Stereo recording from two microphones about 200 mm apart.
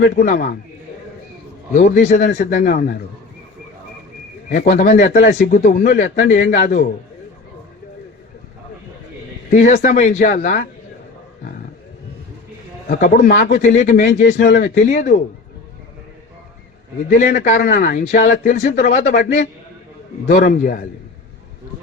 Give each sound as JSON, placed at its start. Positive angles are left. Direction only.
{"t": 0.2, "sound": "speech", "side_deg": 45}
{"t": 1.7, "sound": "speech", "side_deg": 40}
{"t": 4.4, "sound": "speech", "side_deg": 40}
{"t": 9.5, "sound": "speech", "side_deg": 40}
{"t": 12.9, "sound": "speech", "side_deg": 40}
{"t": 17.2, "sound": "speech", "side_deg": 40}